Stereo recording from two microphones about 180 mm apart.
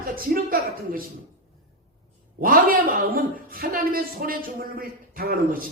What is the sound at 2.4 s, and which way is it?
Speech, 55° right (ahead or behind).